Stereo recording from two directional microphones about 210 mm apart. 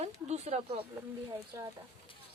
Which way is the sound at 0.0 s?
30° right (ahead or behind).